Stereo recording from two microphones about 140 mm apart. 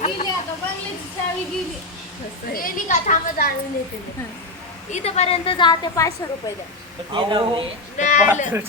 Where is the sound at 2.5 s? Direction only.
85° left.